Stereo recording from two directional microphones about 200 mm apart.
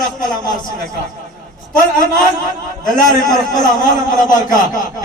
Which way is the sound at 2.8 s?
40° left (ahead or behind).